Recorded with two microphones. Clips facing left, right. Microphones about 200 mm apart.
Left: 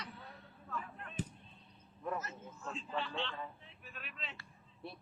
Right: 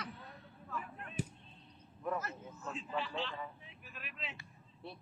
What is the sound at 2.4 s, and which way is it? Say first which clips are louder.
A man's voice: right 1 dB; 5° right (ahead or behind).